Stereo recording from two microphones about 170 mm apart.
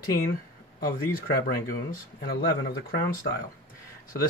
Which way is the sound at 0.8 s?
60° left (ahead or behind).